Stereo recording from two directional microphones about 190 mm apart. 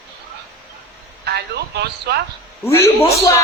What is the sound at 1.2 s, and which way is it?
Speech, 60° right (ahead or behind).